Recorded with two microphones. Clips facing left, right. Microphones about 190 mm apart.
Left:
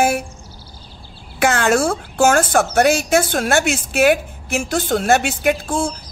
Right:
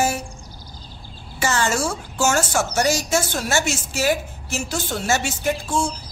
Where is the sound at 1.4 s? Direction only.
60° left (ahead or behind).